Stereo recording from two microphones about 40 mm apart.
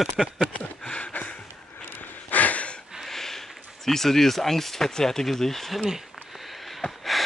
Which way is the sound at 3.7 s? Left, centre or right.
Centre.